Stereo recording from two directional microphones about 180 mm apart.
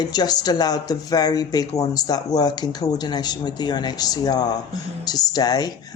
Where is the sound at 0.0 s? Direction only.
25° left (ahead or behind).